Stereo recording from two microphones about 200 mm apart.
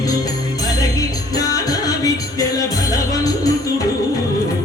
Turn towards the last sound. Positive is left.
turn(degrees=15)  # may be behind; listen again after turning